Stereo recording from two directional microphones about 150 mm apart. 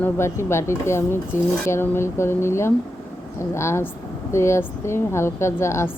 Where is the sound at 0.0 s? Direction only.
15° left (ahead or behind).